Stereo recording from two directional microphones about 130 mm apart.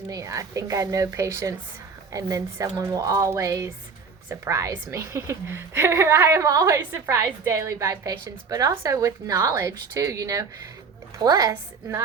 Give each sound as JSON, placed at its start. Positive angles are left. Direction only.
{"t": 0.1, "sound": "a woman's voice", "side_deg": -25}